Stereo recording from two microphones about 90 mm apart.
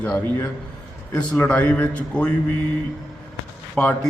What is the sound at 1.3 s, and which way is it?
Speech, 20° left (ahead or behind).